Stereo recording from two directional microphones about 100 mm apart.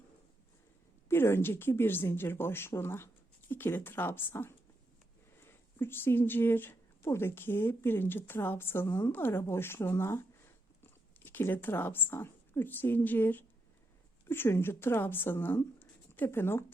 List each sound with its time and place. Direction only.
1.0 s speech: 25° left (ahead or behind)
5.7 s a woman's voice: 20° left (ahead or behind)